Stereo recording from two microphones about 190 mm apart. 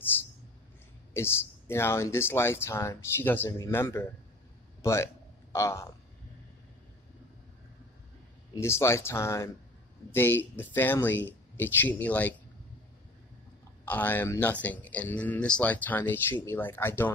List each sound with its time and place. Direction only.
1.1 s speech: 15° left (ahead or behind)
8.5 s speech: 15° left (ahead or behind)
13.8 s speech: 10° left (ahead or behind)